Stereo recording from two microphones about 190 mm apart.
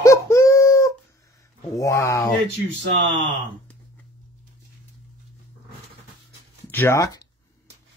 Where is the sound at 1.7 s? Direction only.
15° left (ahead or behind).